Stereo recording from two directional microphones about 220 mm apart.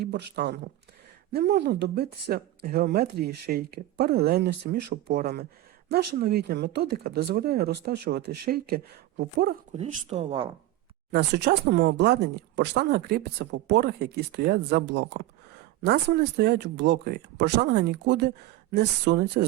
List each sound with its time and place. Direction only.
0.0 s speech: 50° right (ahead or behind)
9.7 s speech: 30° right (ahead or behind)
11.1 s speech: 50° right (ahead or behind)